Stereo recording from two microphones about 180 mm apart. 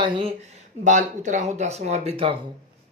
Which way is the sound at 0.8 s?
45° right (ahead or behind).